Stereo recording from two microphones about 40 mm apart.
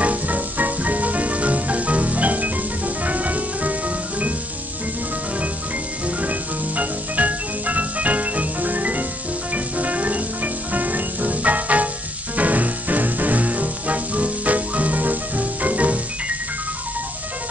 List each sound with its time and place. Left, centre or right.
0.0 s music: right
6.8 s music: right